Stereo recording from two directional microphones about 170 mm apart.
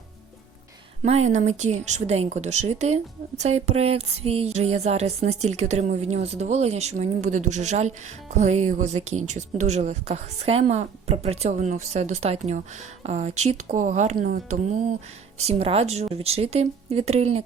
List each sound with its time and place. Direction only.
1.0 s speech: 40° right (ahead or behind)